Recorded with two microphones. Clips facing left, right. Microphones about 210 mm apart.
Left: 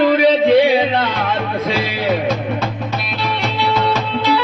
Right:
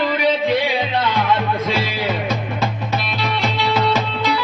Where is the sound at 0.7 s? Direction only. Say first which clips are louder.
Left 7 dB; 30° left (ahead or behind).